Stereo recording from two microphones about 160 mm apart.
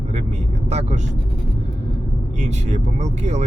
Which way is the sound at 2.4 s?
45° right (ahead or behind).